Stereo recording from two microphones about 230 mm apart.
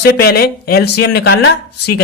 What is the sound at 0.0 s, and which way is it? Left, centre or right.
Speech, left.